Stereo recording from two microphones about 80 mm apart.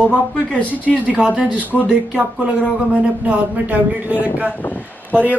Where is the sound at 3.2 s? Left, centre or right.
Right.